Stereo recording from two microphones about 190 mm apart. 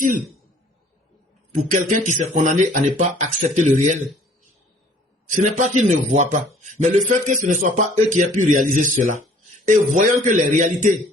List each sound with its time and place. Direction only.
1.5 s speech: 45° right (ahead or behind)
5.3 s speech: 40° right (ahead or behind)